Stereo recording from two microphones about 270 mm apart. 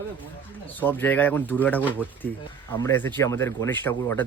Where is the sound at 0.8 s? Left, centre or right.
Centre.